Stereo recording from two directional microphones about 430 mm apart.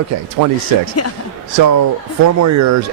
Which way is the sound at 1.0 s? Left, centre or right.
Left.